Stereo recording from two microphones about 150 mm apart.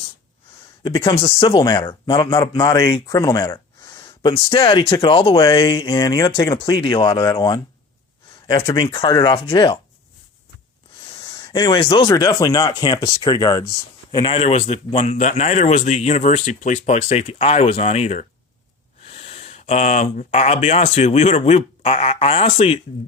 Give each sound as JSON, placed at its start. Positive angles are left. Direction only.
{"t": 0.9, "sound": "speech", "side_deg": 25}
{"t": 1.1, "sound": "speech", "side_deg": 40}
{"t": 11.0, "sound": "a sound", "side_deg": 35}
{"t": 11.3, "sound": "speech", "side_deg": 30}
{"t": 12.0, "sound": "speech", "side_deg": 20}
{"t": 14.3, "sound": "speech", "side_deg": 45}